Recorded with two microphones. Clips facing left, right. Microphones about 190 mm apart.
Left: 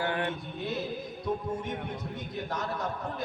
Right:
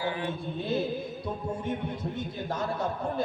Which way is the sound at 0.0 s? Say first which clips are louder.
Left 1 dB; 65° left (ahead or behind).